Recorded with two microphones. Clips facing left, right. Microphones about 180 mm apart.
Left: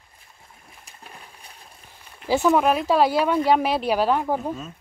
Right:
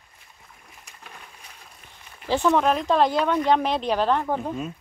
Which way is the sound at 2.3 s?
10° left (ahead or behind).